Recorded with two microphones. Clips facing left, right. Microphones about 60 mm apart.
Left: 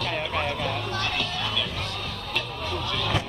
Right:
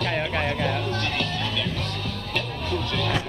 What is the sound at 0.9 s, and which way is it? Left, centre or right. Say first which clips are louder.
Music: right 1 dB; right.